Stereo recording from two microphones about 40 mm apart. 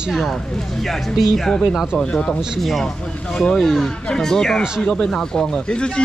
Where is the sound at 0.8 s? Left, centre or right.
Centre.